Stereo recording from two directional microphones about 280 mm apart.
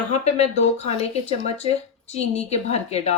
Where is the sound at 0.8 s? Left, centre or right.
Left.